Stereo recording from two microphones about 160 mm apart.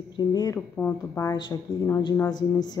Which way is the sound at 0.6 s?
10° left (ahead or behind).